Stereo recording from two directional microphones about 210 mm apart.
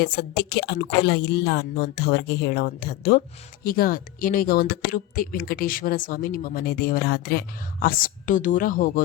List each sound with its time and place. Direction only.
0.0 s a woman's voice: 50° left (ahead or behind)